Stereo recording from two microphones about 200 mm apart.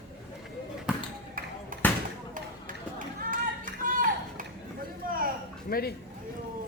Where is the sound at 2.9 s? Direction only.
40° right (ahead or behind).